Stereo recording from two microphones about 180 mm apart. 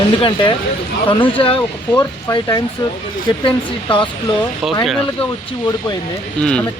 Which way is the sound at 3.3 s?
30° left (ahead or behind).